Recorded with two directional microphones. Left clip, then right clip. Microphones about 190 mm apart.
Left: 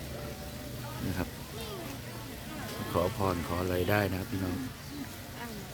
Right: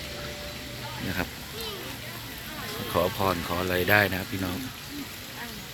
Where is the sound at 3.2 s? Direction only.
10° right (ahead or behind).